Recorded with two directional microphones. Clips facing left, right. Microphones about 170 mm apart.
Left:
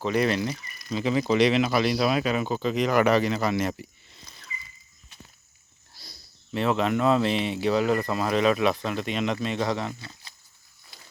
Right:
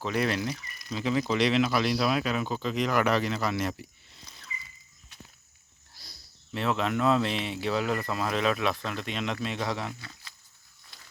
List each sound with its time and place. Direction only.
0.0 s speech: centre (ahead or behind)
6.1 s speech: centre (ahead or behind)
10.0 s a sound: 30° left (ahead or behind)